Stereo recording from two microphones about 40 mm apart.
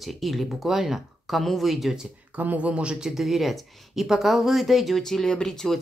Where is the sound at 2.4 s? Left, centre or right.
Right.